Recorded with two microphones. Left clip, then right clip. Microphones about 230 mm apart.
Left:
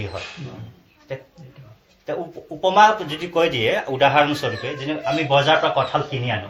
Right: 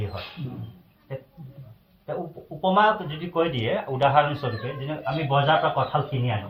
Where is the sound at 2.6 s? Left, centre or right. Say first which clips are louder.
Left 6 dB; left.